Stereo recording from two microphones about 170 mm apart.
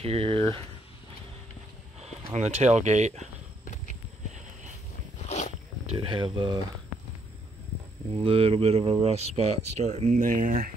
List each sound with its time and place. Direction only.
0.0 s speech: 35° right (ahead or behind)
2.0 s speech: 40° right (ahead or behind)
5.9 s speech: 30° right (ahead or behind)
8.2 s speech: 35° right (ahead or behind); by 10.7 s 55° right (ahead or behind)